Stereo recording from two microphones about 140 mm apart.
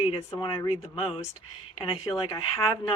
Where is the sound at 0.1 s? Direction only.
40° left (ahead or behind).